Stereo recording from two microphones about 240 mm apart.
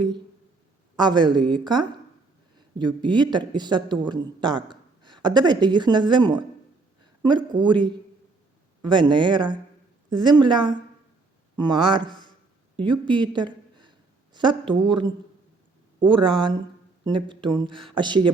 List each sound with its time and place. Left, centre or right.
1.0 s a woman's voice: centre
7.0 s a sound: centre
7.6 s a woman's voice: centre